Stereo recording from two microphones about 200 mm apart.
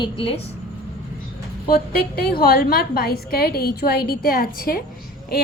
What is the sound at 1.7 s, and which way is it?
A woman's voice, 50° left (ahead or behind).